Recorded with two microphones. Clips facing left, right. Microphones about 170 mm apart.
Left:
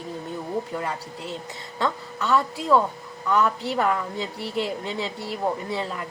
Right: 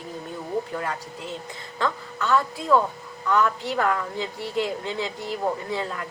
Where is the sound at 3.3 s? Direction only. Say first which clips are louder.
Even; 20° left (ahead or behind).